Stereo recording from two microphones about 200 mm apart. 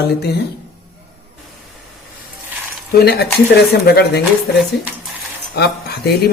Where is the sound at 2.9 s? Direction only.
55° left (ahead or behind).